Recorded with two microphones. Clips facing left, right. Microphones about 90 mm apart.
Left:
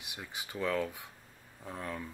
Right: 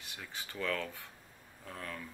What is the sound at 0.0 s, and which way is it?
Speech, 15° left (ahead or behind).